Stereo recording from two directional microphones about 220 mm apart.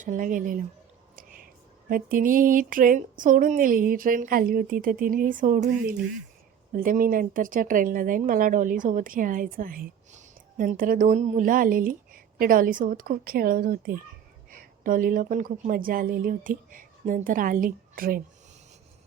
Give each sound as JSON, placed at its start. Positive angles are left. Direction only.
{"t": 0.0, "sound": "speech", "side_deg": -35}
{"t": 1.1, "sound": "whispering", "side_deg": -40}
{"t": 1.9, "sound": "a woman's voice", "side_deg": -40}